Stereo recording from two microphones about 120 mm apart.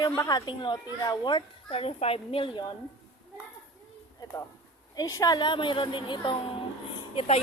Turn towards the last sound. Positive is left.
turn(degrees=55)  # may be behind; listen again after turning